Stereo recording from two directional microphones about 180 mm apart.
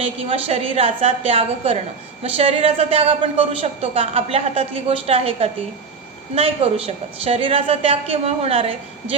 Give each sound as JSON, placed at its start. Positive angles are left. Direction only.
{"t": 0.0, "sound": "a woman's voice", "side_deg": -30}